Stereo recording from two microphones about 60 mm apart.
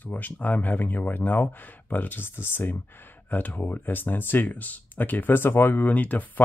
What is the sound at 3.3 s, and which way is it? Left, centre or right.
Speech, left.